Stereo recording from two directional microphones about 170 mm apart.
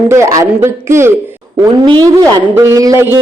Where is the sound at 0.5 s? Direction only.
15° right (ahead or behind).